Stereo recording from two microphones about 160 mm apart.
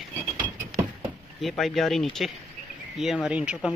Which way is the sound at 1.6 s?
Centre (ahead or behind).